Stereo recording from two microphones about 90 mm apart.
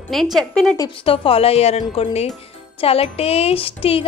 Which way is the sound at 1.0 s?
85° left.